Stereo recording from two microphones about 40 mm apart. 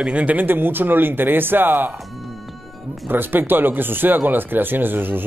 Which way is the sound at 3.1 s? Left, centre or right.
Right.